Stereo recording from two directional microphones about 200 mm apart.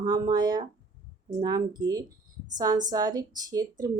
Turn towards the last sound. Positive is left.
turn(degrees=-20)  # may be behind; listen again after turning